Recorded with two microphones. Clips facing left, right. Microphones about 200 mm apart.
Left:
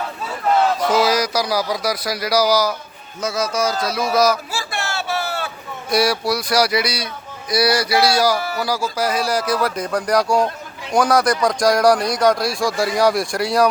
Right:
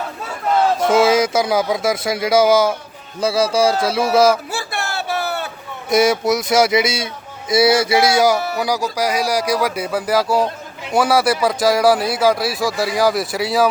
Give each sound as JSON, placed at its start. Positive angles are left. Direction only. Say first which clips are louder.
{"t": 0.8, "sound": "speech", "louder": "right 3 dB", "side_deg": -25}
{"t": 5.9, "sound": "speech", "louder": "right 4 dB", "side_deg": -20}